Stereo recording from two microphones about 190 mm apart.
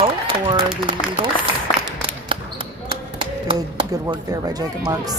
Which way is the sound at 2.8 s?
25° right (ahead or behind).